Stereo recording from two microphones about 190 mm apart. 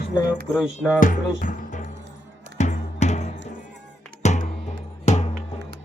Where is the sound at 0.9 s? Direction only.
45° left (ahead or behind).